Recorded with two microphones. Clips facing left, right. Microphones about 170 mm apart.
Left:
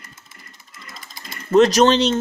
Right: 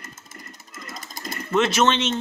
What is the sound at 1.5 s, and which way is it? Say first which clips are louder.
Speech: left 7 dB; 40° left (ahead or behind).